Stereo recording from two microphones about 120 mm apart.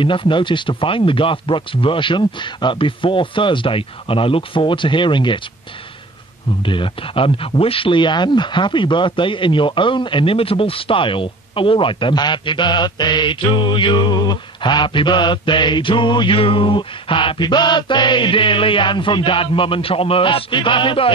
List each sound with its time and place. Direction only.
0.0 s speech: 45° left (ahead or behind)
6.6 s speech: 45° left (ahead or behind)